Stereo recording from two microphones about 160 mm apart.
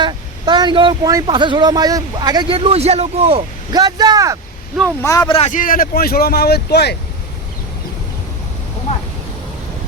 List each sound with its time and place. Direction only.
0.0 s speech: 30° right (ahead or behind)
3.8 s speech: 25° right (ahead or behind)
5.0 s speech: 20° left (ahead or behind)
5.3 s speech: 45° left (ahead or behind); by 6.9 s 90° left